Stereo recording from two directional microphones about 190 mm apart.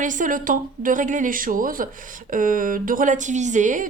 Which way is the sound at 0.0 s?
45° right (ahead or behind).